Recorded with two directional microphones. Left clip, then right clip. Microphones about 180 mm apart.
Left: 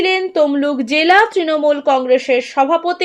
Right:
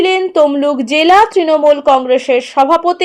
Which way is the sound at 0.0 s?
25° right (ahead or behind).